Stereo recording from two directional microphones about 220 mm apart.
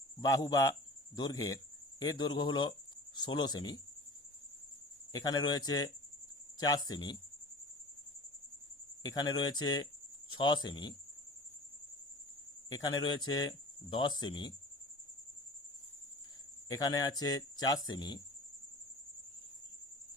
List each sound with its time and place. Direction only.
0.3 s speech: 15° left (ahead or behind)
5.1 s speech: 15° left (ahead or behind)
9.0 s speech: 20° left (ahead or behind)
12.7 s speech: 15° left (ahead or behind)
16.7 s speech: 15° left (ahead or behind)